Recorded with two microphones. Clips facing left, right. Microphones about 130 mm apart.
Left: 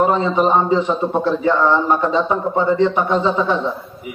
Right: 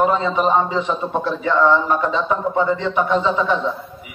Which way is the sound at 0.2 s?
35° left (ahead or behind).